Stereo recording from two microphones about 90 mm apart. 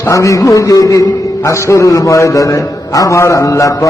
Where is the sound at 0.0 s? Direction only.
35° left (ahead or behind).